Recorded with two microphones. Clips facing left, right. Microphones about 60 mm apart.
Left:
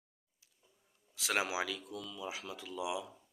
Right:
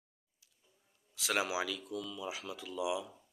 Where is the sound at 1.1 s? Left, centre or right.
Left.